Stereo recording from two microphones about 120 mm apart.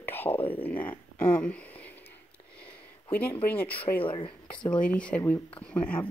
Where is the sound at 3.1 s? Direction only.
15° left (ahead or behind).